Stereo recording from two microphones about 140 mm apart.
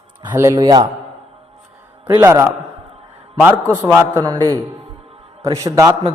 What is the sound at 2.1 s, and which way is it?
A man's voice, 20° right (ahead or behind).